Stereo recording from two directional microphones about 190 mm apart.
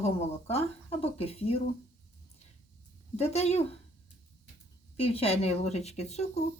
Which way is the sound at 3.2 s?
35° left (ahead or behind).